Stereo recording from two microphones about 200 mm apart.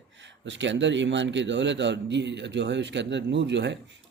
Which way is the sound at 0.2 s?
65° right (ahead or behind).